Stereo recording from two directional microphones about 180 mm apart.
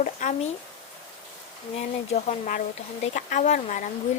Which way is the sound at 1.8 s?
40° left (ahead or behind).